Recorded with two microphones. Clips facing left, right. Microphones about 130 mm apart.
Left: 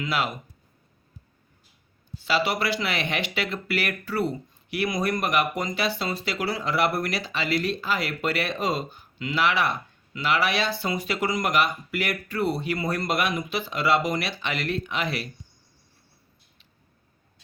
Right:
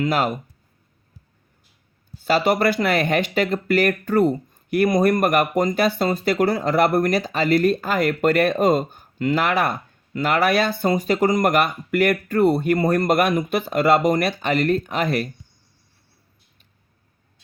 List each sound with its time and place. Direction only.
0.0 s speech: 45° right (ahead or behind)
2.2 s speech: 45° right (ahead or behind)